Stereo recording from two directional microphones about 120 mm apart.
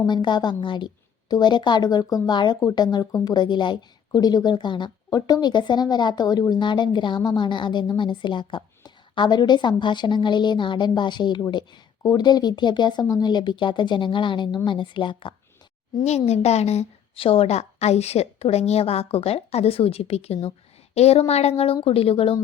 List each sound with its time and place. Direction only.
0.0 s speech: 40° left (ahead or behind)
16.0 s a woman's voice: 60° left (ahead or behind)